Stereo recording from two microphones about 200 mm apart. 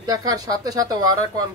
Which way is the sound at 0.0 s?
20° right (ahead or behind).